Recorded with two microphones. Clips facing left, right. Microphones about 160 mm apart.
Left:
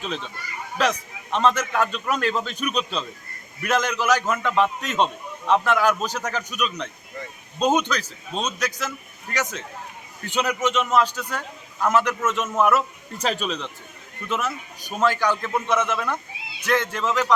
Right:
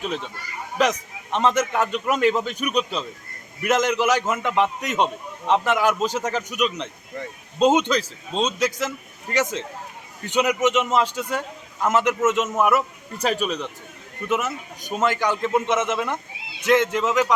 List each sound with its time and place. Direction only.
0.0 s a man's voice: 15° right (ahead or behind)